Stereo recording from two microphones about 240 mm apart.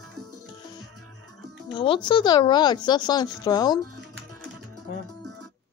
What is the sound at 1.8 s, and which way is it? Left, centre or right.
Speech, centre.